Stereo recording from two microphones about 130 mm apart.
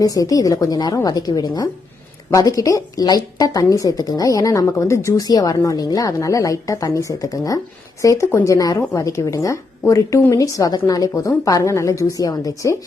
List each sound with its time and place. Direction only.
0.0 s a woman's voice: 25° left (ahead or behind)